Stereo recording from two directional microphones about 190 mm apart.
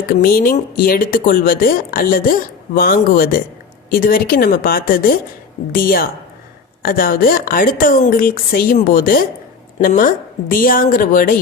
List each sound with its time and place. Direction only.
0.1 s speech: 50° left (ahead or behind)